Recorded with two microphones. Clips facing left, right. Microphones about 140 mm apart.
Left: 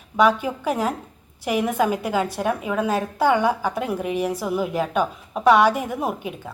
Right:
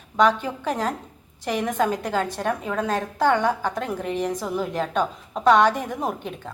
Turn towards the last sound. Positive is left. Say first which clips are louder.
# left 2 dB
turn(degrees=10)  # may be behind; listen again after turning